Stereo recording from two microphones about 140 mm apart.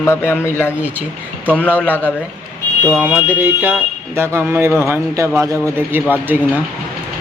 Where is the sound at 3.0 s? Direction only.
10° right (ahead or behind).